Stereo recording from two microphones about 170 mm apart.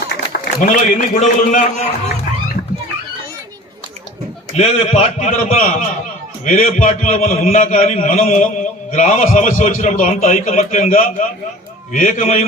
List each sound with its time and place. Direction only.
0.6 s a man's voice: 50° left (ahead or behind)
4.5 s a man's voice: 40° left (ahead or behind)